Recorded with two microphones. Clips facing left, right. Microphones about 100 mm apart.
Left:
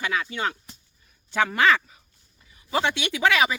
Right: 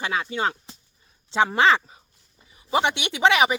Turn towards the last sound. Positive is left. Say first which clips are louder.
# right 2 dB
turn(degrees=-20)  # may be behind; listen again after turning